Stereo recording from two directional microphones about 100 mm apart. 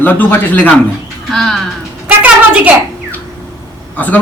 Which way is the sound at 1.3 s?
5° left (ahead or behind).